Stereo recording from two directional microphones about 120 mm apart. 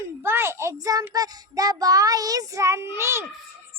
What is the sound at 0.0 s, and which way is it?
A child's voice, 20° right (ahead or behind).